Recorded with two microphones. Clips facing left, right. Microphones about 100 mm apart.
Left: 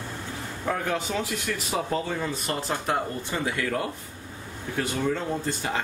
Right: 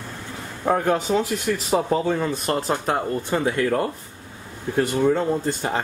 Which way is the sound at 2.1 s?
45° right (ahead or behind).